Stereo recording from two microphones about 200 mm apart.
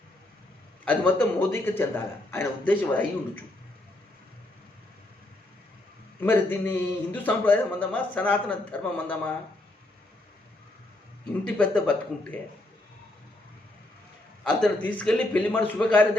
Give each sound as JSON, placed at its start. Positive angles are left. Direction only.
{"t": 0.9, "sound": "a man's voice", "side_deg": 10}
{"t": 6.2, "sound": "a man's voice", "side_deg": 10}
{"t": 11.4, "sound": "a man's voice", "side_deg": 5}
{"t": 14.4, "sound": "a man's voice", "side_deg": 5}